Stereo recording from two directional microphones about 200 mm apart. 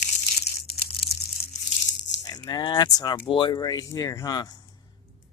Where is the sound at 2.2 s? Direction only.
20° left (ahead or behind).